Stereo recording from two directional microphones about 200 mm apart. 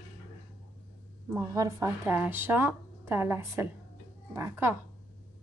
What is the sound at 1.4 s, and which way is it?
Speech, 15° right (ahead or behind).